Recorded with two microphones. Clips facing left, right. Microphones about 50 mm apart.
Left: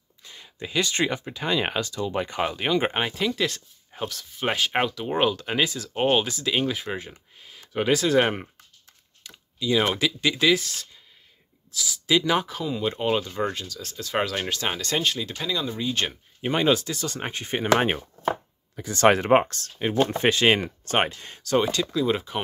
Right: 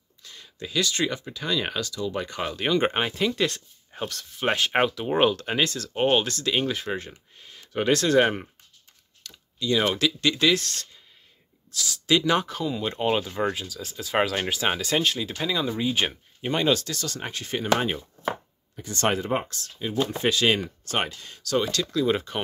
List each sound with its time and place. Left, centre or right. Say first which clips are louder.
0.2 s speech: left 1 dB; centre
2.6 s speech: right 3 dB; centre
16.3 s speech: left 2 dB; centre
17.1 s speech: left 2 dB; left
17.7 s speech: left 5 dB; left
19.0 s speech: left 7 dB; left
21.9 s speech: even; centre